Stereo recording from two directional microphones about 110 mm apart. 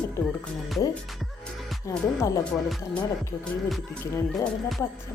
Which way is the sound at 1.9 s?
30° left (ahead or behind).